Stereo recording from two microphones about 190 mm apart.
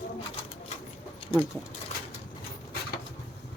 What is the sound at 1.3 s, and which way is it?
Speech, 25° left (ahead or behind).